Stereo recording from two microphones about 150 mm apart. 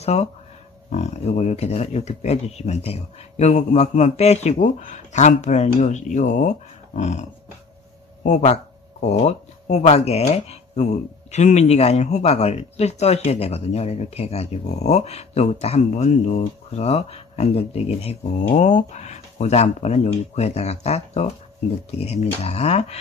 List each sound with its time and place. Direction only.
0.0 s speech: 45° left (ahead or behind)
8.3 s speech: 45° left (ahead or behind)